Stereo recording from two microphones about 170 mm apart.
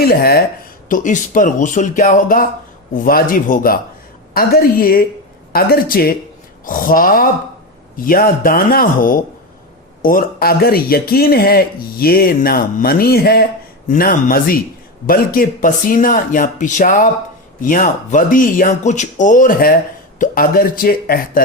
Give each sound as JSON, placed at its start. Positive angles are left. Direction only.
{"t": 0.0, "sound": "speech", "side_deg": 60}
{"t": 0.9, "sound": "speech", "side_deg": 50}
{"t": 13.8, "sound": "speech", "side_deg": 50}